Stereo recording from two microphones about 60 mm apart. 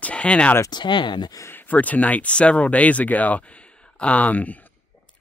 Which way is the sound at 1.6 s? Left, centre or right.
Left.